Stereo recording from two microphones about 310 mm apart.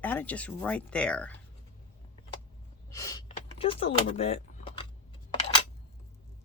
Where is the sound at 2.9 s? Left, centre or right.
Centre.